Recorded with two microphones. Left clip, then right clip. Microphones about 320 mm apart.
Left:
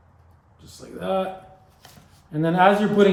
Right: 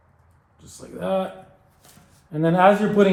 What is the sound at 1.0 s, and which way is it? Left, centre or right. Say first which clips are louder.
Speech: right 1 dB; right.